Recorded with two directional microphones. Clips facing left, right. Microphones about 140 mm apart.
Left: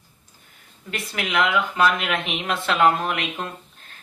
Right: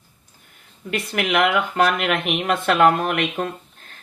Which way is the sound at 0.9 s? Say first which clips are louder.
Right 6 dB; 60° right (ahead or behind).